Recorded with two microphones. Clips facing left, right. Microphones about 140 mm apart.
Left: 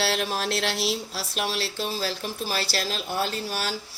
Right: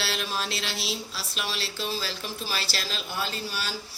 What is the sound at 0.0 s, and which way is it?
A woman's voice, 60° left (ahead or behind).